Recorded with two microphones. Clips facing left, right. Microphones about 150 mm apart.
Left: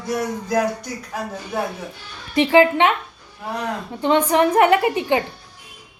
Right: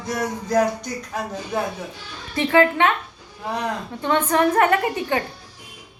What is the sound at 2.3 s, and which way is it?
Speech, 15° left (ahead or behind).